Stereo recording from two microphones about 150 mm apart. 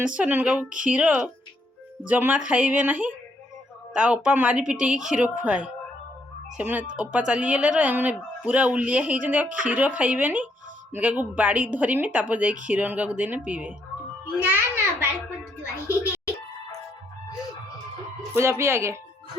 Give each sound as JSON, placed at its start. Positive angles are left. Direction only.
{"t": 0.1, "sound": "a child's voice", "side_deg": -10}
{"t": 15.9, "sound": "music", "side_deg": -10}
{"t": 18.3, "sound": "speech", "side_deg": -15}